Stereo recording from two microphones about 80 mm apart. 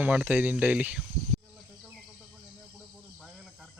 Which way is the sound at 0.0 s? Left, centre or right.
Centre.